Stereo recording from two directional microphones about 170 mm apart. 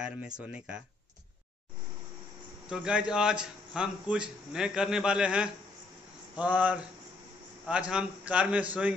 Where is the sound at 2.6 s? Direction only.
5° right (ahead or behind).